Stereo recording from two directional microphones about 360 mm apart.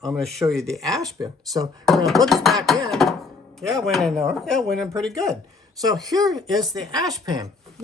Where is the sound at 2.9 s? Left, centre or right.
Centre.